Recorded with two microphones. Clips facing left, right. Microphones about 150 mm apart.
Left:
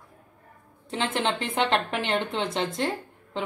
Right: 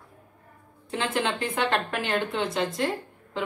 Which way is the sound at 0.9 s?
25° left (ahead or behind).